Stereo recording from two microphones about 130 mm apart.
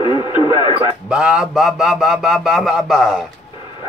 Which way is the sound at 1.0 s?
5° right (ahead or behind).